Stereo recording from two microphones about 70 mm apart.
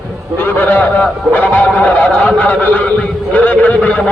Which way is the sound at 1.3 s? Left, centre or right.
Left.